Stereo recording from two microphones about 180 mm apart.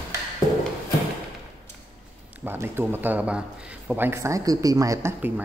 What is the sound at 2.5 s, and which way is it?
Speech, 10° right (ahead or behind).